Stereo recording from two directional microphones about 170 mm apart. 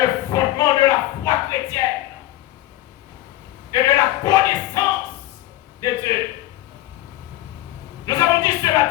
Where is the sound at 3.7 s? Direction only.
20° left (ahead or behind).